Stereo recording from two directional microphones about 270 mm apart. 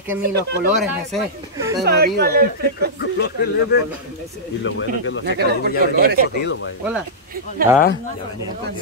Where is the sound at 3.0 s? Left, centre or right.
Left.